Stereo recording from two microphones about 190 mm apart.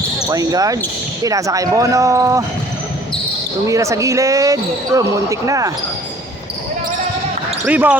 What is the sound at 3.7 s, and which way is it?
Speech, 15° right (ahead or behind).